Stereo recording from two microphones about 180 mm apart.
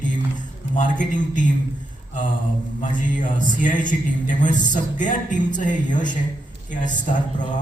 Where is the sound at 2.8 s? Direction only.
45° left (ahead or behind).